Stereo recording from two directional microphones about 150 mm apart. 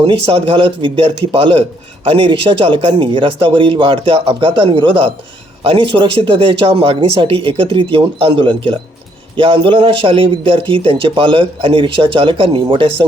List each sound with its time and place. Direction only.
0.0 s a man's voice: 40° right (ahead or behind)